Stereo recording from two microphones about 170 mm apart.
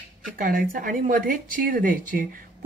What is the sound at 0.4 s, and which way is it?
Speech, 55° right (ahead or behind).